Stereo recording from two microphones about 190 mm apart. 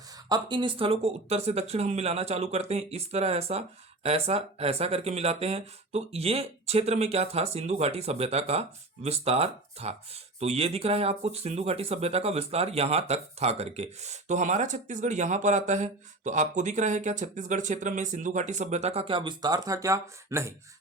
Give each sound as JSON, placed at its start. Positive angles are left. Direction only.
{"t": 0.3, "sound": "speech", "side_deg": -20}